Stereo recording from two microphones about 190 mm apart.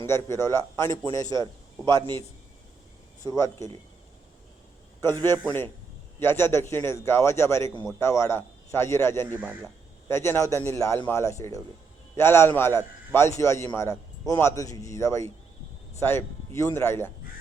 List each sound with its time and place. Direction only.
0.0 s a man's voice: 15° left (ahead or behind)
2.0 s a man's voice: 25° right (ahead or behind)
3.2 s a man's voice: 15° left (ahead or behind)
4.9 s a man's voice: 15° left (ahead or behind)
9.4 s speech: 5° right (ahead or behind)
10.1 s a man's voice: 15° left (ahead or behind)